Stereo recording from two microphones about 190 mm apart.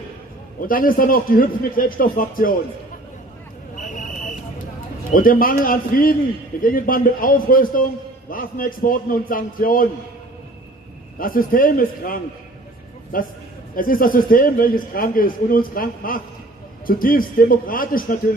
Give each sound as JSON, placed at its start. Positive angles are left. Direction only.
{"t": 0.6, "sound": "speech", "side_deg": 50}
{"t": 3.7, "sound": "vehicle", "side_deg": 40}
{"t": 5.1, "sound": "speech", "side_deg": 50}
{"t": 11.1, "sound": "speech", "side_deg": 50}